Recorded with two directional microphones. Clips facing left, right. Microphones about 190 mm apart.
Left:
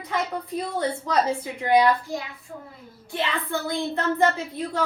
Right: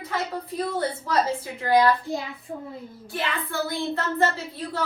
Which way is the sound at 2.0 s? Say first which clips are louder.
Right 2 dB; 35° right (ahead or behind).